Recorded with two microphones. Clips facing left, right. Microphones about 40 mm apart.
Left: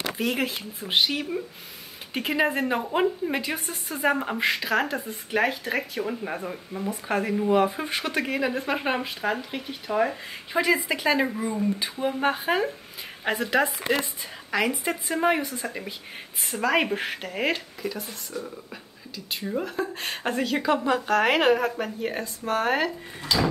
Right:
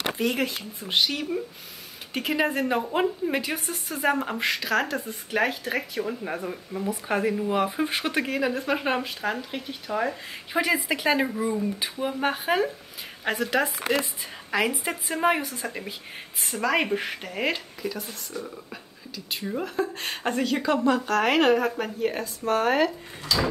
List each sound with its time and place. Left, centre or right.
0.2 s speech: centre
8.3 s speech: centre
10.5 s speech: centre
14.5 s speech: centre